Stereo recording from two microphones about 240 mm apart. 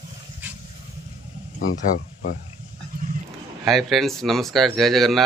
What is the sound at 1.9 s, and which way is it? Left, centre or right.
Speech, left.